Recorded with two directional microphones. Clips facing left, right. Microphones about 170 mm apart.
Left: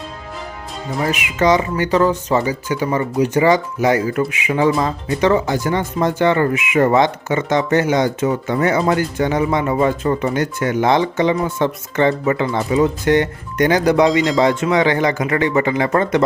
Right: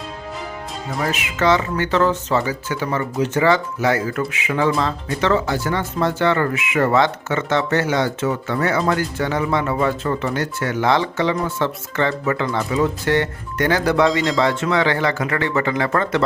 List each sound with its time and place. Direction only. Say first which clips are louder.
1.0 s speech: left 3 dB; 15° left (ahead or behind)